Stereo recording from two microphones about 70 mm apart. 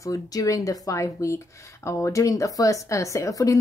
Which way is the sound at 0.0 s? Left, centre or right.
Left.